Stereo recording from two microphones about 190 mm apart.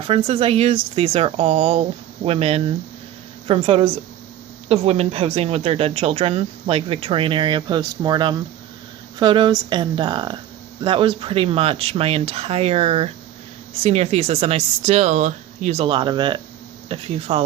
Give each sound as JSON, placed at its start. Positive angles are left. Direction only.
{"t": 0.1, "sound": "speech", "side_deg": -30}